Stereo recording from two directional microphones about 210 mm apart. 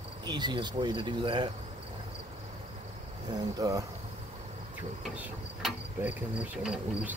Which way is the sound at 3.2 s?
20° right (ahead or behind).